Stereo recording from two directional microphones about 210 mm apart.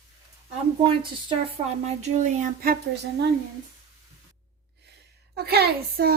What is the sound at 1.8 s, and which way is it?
Speech, 35° right (ahead or behind).